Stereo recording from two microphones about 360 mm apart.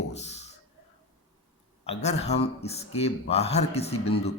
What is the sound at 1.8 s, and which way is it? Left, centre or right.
Speech, centre.